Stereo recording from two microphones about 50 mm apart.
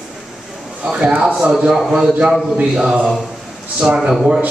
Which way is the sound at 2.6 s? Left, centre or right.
Centre.